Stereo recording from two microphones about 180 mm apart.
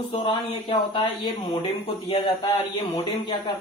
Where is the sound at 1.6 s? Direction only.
35° left (ahead or behind).